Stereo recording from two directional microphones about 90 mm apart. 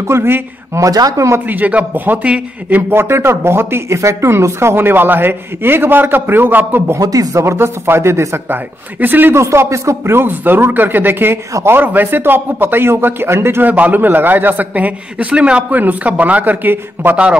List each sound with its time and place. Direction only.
0.0 s speech: 30° right (ahead or behind)
1.5 s speech: 15° right (ahead or behind)
2.9 s speech: 25° right (ahead or behind)
7.0 s speech: 40° right (ahead or behind); by 17.4 s 15° right (ahead or behind)